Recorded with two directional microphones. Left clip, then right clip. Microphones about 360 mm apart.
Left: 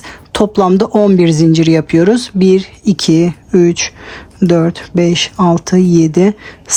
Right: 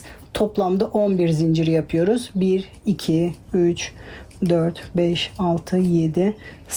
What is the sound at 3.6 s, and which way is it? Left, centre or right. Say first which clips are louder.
A woman's voice: left 8 dB; left.